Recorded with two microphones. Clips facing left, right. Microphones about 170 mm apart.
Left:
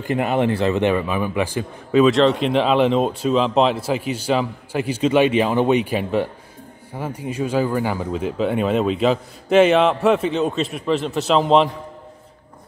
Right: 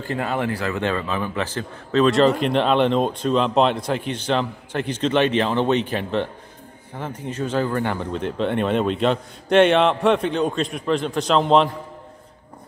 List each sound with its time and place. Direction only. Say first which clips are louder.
0.0 s speech: left 5 dB; 15° left (ahead or behind)
2.0 s speech: left 1 dB; centre (ahead or behind)